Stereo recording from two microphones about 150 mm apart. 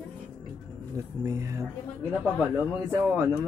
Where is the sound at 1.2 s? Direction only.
20° right (ahead or behind).